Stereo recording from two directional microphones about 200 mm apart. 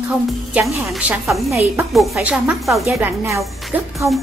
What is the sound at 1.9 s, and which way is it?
A woman's voice, centre (ahead or behind).